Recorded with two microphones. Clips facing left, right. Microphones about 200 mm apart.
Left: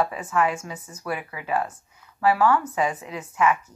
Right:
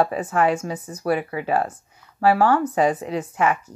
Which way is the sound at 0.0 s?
35° right (ahead or behind).